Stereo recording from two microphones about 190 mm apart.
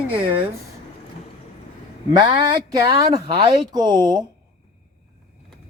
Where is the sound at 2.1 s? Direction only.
25° right (ahead or behind).